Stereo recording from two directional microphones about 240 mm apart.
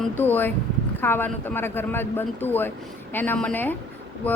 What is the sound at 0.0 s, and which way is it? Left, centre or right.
A woman's voice, centre.